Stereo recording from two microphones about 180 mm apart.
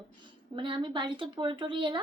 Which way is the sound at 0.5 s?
30° right (ahead or behind).